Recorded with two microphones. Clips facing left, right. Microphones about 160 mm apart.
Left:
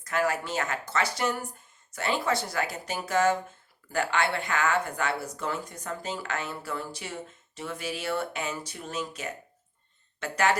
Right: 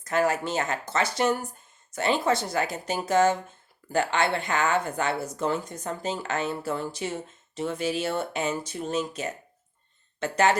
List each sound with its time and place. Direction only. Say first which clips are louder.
0.0 s speech: right 3 dB; 25° right (ahead or behind)